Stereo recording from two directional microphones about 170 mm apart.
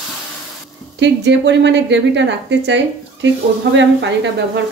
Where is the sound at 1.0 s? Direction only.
90° right.